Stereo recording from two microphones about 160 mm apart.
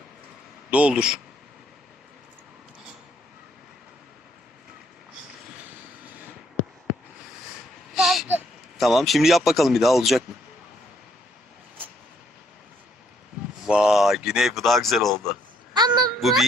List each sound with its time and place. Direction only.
0.7 s speech: 5° right (ahead or behind)
7.9 s a sound: centre (ahead or behind)
8.8 s speech: centre (ahead or behind)
13.7 s speech: 5° right (ahead or behind)
15.7 s a sound: 25° right (ahead or behind)
16.2 s speech: centre (ahead or behind)